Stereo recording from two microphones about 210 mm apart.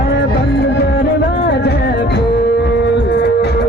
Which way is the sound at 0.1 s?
50° left (ahead or behind).